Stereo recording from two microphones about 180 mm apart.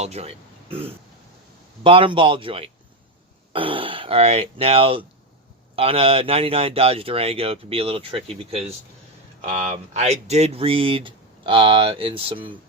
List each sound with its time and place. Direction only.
0.0 s speech: 35° right (ahead or behind)